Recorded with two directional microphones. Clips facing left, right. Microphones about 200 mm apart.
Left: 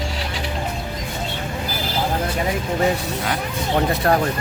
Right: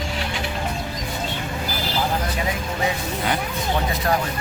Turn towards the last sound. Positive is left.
turn(degrees=55)  # may be behind; listen again after turning